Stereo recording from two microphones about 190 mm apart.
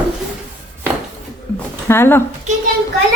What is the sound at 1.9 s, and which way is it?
Speech, 10° left (ahead or behind).